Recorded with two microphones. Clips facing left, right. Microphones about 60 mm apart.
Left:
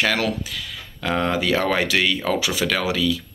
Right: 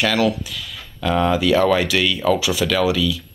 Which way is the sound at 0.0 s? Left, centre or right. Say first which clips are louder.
Right 3 dB; left.